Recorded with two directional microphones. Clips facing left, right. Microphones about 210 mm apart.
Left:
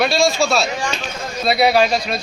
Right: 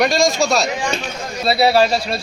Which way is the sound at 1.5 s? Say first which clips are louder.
Even; 30° right (ahead or behind).